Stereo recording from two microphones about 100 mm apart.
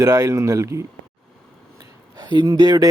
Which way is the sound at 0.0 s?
35° right (ahead or behind).